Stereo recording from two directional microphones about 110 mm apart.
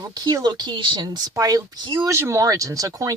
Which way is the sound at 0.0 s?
35° right (ahead or behind).